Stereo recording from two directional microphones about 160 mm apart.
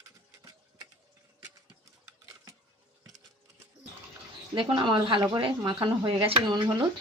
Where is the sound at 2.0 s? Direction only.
20° right (ahead or behind).